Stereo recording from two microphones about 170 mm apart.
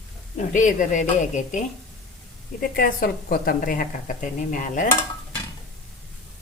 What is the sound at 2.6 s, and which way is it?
A woman's voice, 60° left (ahead or behind).